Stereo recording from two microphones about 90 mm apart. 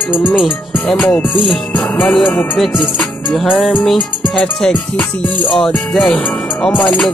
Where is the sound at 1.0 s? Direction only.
20° left (ahead or behind).